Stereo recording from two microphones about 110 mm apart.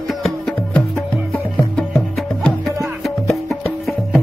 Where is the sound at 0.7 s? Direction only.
15° left (ahead or behind).